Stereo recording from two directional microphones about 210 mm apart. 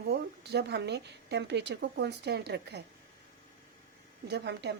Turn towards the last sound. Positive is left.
turn(degrees=-55)  # may be behind; listen again after turning